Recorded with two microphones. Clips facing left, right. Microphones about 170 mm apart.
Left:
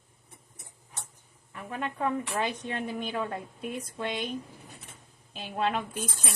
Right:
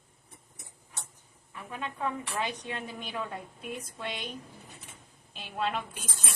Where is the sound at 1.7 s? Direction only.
50° left (ahead or behind).